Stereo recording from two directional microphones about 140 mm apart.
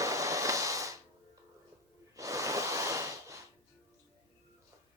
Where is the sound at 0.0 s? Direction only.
25° right (ahead or behind).